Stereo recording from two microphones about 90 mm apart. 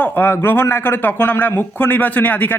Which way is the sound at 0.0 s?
20° left (ahead or behind).